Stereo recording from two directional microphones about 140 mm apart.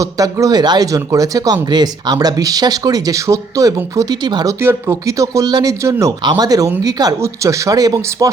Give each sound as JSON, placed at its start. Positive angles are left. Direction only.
{"t": 0.0, "sound": "speech", "side_deg": -25}
{"t": 4.6, "sound": "speech", "side_deg": -20}